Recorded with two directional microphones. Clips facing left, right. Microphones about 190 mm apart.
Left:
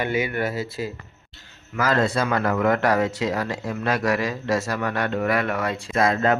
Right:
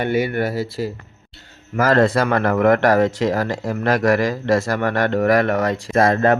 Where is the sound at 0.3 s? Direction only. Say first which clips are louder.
Right 4 dB; 35° right (ahead or behind).